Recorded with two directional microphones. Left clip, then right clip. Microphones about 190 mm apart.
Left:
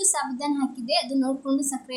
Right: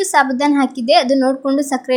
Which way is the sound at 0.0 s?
30° right (ahead or behind).